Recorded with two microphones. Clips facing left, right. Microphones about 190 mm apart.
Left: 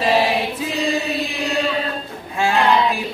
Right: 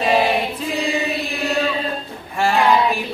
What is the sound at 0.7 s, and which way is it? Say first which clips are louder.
Chant: left 1 dB; centre (ahead or behind).